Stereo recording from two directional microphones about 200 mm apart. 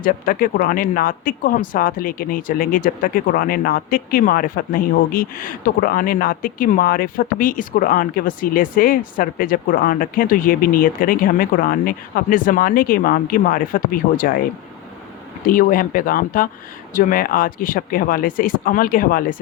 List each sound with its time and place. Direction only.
0.0 s speech: 45° left (ahead or behind)
15.4 s speech: 45° left (ahead or behind)